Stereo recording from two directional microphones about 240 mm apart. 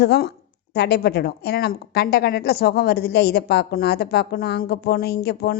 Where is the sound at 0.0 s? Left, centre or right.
Left.